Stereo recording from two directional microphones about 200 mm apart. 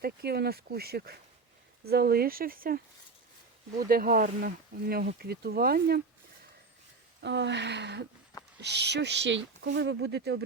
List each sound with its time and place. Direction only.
0.0 s speech: 50° right (ahead or behind)
7.2 s speech: 60° right (ahead or behind)